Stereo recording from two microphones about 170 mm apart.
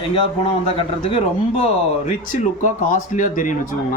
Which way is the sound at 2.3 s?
45° left (ahead or behind).